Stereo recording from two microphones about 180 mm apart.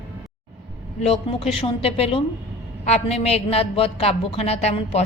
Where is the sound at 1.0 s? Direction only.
35° left (ahead or behind).